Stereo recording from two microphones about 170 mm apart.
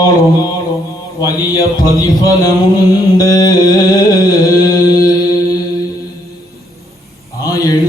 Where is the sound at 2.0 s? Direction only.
20° left (ahead or behind).